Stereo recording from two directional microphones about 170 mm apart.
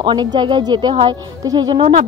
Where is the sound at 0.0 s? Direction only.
25° right (ahead or behind).